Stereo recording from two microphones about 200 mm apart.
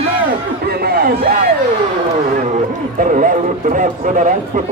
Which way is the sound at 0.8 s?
50° right (ahead or behind).